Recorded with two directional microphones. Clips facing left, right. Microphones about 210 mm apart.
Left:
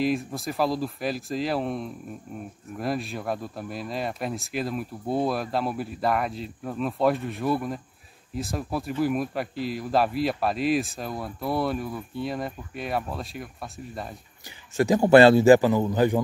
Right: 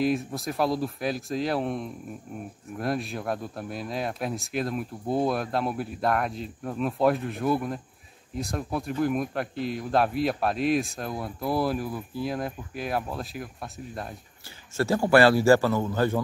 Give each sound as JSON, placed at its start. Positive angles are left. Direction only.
{"t": 0.0, "sound": "speech", "side_deg": 0}
{"t": 14.8, "sound": "a man's voice", "side_deg": 20}